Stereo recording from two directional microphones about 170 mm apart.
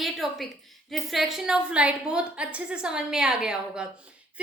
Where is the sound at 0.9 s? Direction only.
Centre (ahead or behind).